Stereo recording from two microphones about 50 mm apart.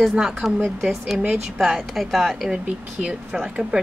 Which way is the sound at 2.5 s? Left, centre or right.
Right.